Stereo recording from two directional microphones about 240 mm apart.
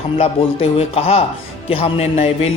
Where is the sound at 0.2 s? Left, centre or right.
Left.